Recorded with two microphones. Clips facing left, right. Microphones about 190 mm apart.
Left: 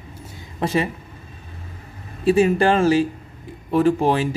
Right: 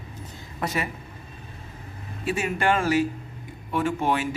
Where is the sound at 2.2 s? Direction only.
35° left (ahead or behind).